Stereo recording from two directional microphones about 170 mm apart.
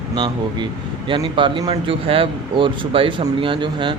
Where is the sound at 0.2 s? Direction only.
25° right (ahead or behind).